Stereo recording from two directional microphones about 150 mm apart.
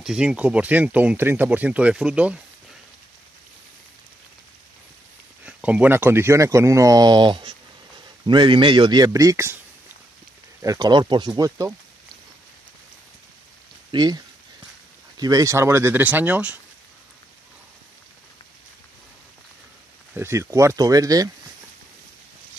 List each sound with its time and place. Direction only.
0.0 s speech: 5° right (ahead or behind)
5.4 s speech: 10° right (ahead or behind)
10.6 s speech: 25° right (ahead or behind)
13.9 s speech: 30° right (ahead or behind); by 16.5 s 10° right (ahead or behind)
20.2 s speech: 20° right (ahead or behind)